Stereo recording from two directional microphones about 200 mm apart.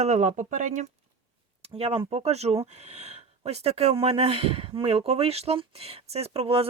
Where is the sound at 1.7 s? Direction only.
30° right (ahead or behind).